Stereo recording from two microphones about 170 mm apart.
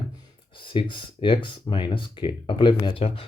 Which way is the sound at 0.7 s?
30° left (ahead or behind).